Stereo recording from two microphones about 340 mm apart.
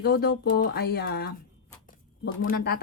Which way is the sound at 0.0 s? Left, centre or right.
Left.